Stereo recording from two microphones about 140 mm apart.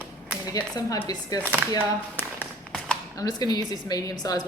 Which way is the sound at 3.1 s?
25° left (ahead or behind).